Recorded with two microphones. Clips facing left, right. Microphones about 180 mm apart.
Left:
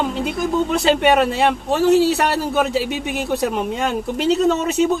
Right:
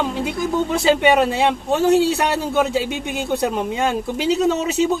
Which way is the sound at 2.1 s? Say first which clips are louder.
Left 1 dB; 65° left (ahead or behind).